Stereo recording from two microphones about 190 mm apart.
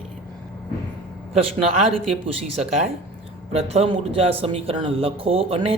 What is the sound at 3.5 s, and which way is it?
Speech, 30° right (ahead or behind).